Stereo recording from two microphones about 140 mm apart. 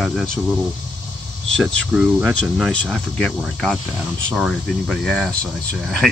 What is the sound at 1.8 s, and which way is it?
Speech, 5° right (ahead or behind).